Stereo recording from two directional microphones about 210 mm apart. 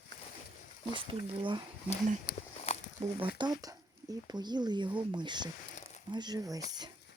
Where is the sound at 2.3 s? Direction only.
50° left (ahead or behind).